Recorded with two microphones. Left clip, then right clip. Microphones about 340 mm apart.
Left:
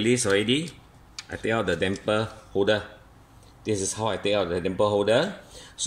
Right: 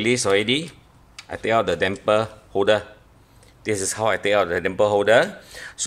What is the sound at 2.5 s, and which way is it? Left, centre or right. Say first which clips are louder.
Speech: right 4 dB; right.